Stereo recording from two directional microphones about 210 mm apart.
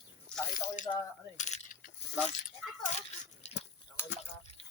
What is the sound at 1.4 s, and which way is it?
Coin, 35° left (ahead or behind).